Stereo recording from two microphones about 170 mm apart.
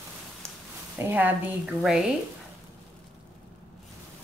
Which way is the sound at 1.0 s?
10° right (ahead or behind).